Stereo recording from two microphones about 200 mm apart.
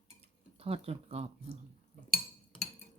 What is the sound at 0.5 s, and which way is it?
Speech, 30° right (ahead or behind).